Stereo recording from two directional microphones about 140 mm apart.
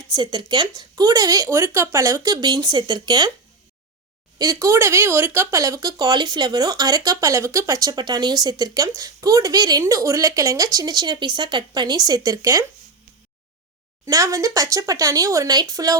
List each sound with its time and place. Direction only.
0.1 s speech: 30° right (ahead or behind)
4.4 s speech: 25° right (ahead or behind)
14.0 s speech: 25° right (ahead or behind)